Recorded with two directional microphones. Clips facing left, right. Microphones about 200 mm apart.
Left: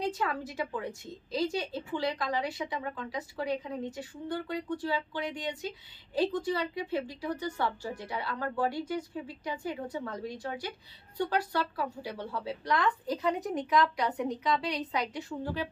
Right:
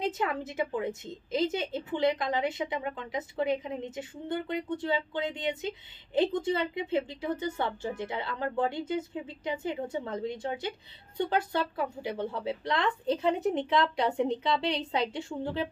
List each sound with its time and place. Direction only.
0.0 s a woman's voice: 20° right (ahead or behind)